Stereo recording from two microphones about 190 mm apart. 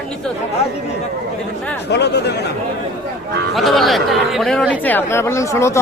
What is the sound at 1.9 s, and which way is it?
Speech, 60° left (ahead or behind).